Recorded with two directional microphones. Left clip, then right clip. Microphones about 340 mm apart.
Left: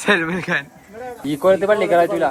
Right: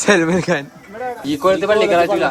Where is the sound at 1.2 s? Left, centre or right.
Centre.